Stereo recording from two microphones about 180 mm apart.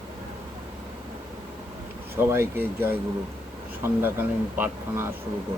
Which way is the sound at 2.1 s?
15° right (ahead or behind).